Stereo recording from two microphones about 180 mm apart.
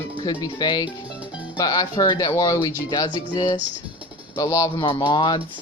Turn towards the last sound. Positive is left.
turn(degrees=25)  # may be behind; listen again after turning